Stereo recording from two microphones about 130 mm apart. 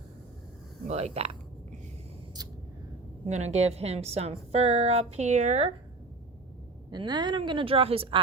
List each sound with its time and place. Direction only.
0.9 s a woman's voice: 55° right (ahead or behind)
3.2 s a woman's voice: 60° right (ahead or behind)
6.9 s a woman's voice: 35° right (ahead or behind)